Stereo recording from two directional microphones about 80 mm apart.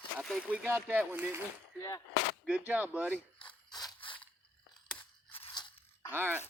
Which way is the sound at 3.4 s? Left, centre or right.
Left.